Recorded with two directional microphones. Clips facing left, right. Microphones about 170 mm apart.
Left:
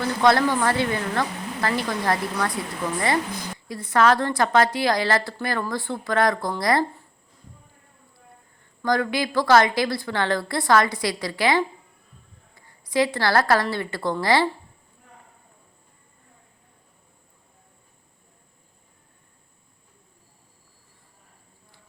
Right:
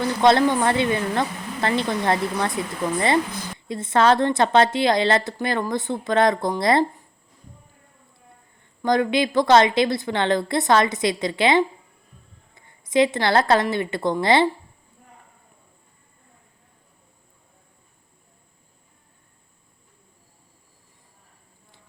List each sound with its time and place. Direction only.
0.0 s a woman's voice: 20° right (ahead or behind)
3.7 s a woman's voice: 25° right (ahead or behind)
8.8 s a woman's voice: 20° right (ahead or behind)